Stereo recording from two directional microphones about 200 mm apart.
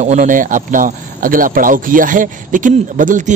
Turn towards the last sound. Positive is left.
turn(degrees=-40)  # may be behind; listen again after turning